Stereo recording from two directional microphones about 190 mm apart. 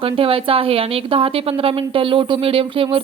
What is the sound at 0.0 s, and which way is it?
A woman's voice, 30° right (ahead or behind).